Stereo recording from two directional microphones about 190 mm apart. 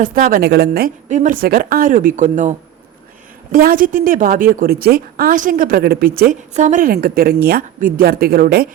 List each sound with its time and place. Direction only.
0.0 s a woman's voice: 45° right (ahead or behind)
6.5 s a woman's voice: 40° right (ahead or behind)